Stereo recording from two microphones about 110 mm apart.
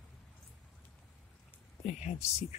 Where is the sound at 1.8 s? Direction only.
90° left.